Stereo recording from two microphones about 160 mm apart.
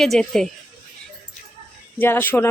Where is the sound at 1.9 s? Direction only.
15° left (ahead or behind).